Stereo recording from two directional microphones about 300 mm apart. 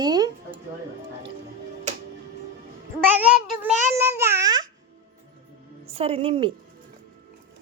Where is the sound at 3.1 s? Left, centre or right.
Centre.